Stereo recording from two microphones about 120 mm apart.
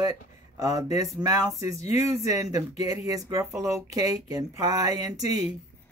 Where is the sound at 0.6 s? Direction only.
30° right (ahead or behind).